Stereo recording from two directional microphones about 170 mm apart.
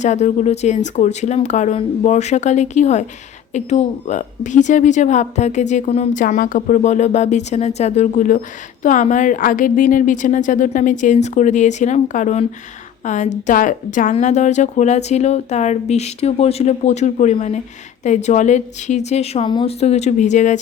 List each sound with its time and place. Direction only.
0.0 s a woman's voice: 45° left (ahead or behind)
6.2 s a woman's voice: 55° left (ahead or behind); by 19.7 s 30° left (ahead or behind)
19.8 s a woman's voice: 40° left (ahead or behind)